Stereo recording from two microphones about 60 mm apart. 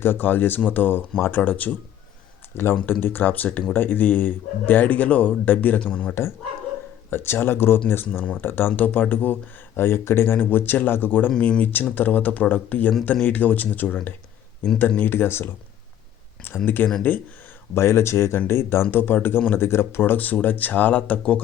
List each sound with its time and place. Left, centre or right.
0.0 s speech: left
2.8 s speech: left
7.1 s speech: left
8.2 s speech: left
8.4 s speech: left
11.3 s speech: left
16.6 s speech: left
17.7 s speech: left